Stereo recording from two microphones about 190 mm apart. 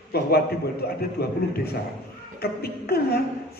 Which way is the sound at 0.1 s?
55° left (ahead or behind).